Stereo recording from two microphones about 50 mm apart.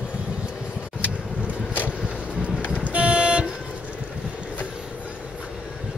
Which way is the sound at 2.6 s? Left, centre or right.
Left.